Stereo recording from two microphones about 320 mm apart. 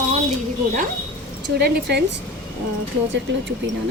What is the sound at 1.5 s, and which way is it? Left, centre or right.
Speech, right.